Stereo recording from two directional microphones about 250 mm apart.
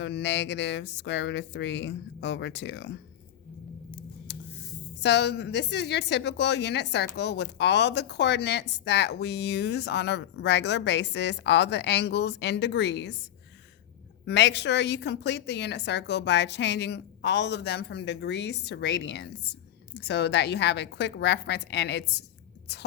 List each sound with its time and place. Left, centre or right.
0.0 s speech: left
4.3 s a sound: left
4.9 s speech: left
14.3 s speech: left